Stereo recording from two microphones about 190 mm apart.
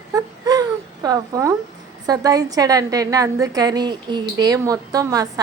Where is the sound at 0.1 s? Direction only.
20° right (ahead or behind).